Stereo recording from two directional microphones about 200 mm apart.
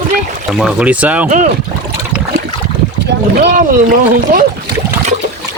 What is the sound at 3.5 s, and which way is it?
Speech, 45° right (ahead or behind).